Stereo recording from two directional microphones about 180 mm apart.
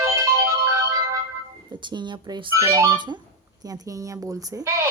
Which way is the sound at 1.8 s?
25° right (ahead or behind).